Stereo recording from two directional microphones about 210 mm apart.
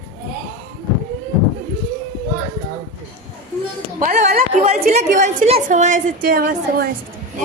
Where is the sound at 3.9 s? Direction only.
35° right (ahead or behind).